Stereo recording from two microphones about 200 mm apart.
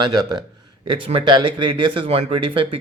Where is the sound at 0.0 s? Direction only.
20° right (ahead or behind).